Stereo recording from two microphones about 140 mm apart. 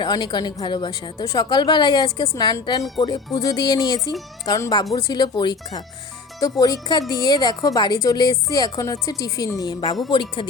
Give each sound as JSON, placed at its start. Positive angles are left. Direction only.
{"t": 0.0, "sound": "a woman's voice", "side_deg": 35}